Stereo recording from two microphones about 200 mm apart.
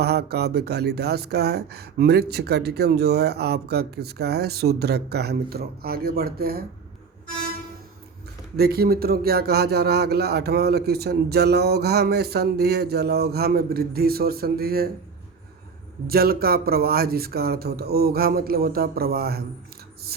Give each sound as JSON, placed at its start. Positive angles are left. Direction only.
{"t": 0.0, "sound": "speech", "side_deg": -55}
{"t": 8.5, "sound": "speech", "side_deg": -50}
{"t": 16.0, "sound": "speech", "side_deg": -50}